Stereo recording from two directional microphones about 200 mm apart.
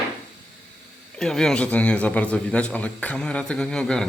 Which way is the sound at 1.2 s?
5° left (ahead or behind).